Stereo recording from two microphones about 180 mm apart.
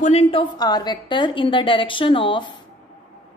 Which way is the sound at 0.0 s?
35° left (ahead or behind).